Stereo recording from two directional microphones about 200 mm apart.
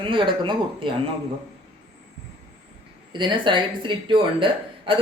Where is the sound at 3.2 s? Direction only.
25° right (ahead or behind).